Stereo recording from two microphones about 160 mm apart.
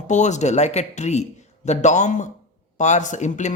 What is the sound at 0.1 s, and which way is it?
Speech, 45° left (ahead or behind).